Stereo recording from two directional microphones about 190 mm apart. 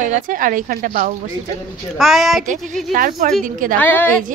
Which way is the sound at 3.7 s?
10° left (ahead or behind).